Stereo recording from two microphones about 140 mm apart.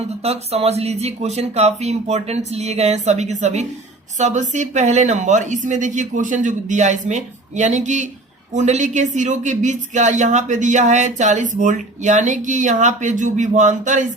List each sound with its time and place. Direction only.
0.2 s speech: 45° right (ahead or behind); by 14.1 s 60° right (ahead or behind)